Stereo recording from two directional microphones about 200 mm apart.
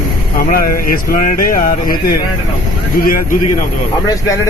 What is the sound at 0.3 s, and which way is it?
Speech, 45° left (ahead or behind).